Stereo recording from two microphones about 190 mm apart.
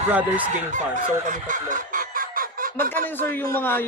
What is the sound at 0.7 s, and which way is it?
Chicken, 40° right (ahead or behind).